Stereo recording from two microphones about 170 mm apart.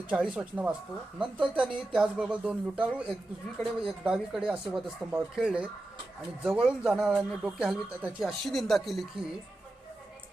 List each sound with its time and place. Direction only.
0.3 s speech: 10° right (ahead or behind)